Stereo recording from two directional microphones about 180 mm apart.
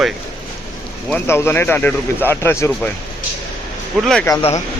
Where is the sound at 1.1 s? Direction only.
10° left (ahead or behind).